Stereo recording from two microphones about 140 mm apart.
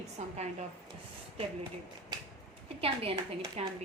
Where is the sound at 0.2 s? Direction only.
50° right (ahead or behind).